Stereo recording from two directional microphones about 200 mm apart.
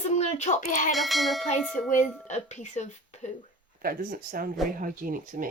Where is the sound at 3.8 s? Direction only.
45° right (ahead or behind).